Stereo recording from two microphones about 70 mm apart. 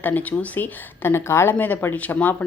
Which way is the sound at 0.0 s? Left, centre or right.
Left.